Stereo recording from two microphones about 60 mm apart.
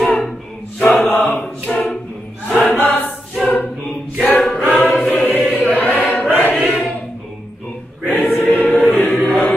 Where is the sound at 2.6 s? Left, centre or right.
Left.